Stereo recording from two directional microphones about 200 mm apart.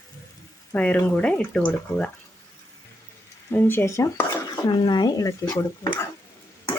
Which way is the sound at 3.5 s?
10° left (ahead or behind).